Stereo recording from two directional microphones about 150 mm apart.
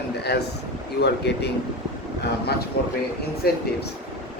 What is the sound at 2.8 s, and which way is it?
Speech, 90° left.